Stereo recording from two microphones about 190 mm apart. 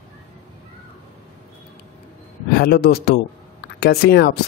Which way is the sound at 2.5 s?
55° left (ahead or behind).